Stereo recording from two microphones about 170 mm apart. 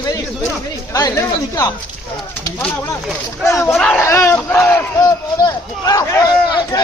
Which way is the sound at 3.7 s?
5° left (ahead or behind).